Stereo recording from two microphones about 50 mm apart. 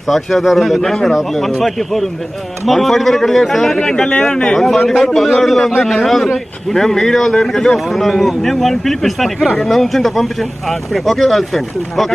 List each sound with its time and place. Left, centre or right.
0.1 s a man's voice: centre
4.1 s a man's voice: centre
4.6 s a man's voice: centre